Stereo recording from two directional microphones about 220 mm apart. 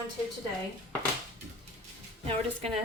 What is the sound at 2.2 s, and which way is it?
Speech, 25° right (ahead or behind).